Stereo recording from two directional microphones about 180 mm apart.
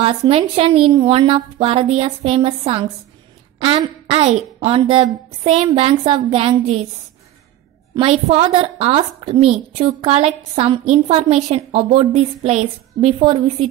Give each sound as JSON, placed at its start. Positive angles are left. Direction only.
{"t": 0.0, "sound": "a woman's voice", "side_deg": -30}
{"t": 7.9, "sound": "a woman's voice", "side_deg": -35}